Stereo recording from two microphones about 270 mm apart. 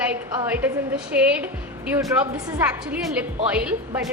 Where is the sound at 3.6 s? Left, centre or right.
Centre.